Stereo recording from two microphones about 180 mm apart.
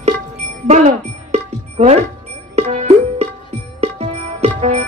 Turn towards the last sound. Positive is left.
turn(degrees=-35)  # may be behind; listen again after turning